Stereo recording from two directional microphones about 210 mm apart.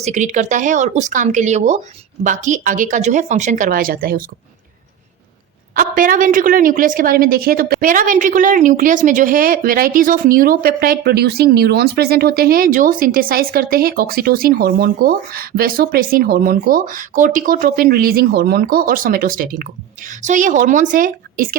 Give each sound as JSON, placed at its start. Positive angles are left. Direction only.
{"t": 0.0, "sound": "a woman's voice", "side_deg": -35}
{"t": 5.7, "sound": "a woman's voice", "side_deg": -40}